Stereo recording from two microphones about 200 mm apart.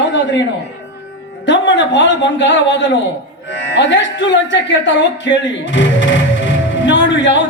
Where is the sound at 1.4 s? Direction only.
65° left (ahead or behind).